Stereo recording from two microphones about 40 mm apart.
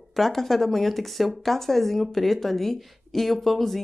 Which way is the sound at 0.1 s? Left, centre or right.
Centre.